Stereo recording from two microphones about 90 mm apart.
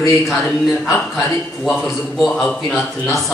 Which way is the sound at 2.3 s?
5° left (ahead or behind).